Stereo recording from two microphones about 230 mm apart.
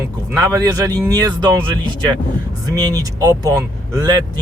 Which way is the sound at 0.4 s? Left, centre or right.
Centre.